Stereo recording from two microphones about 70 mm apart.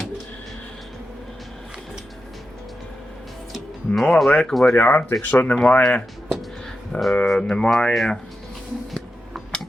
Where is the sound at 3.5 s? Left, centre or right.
Centre.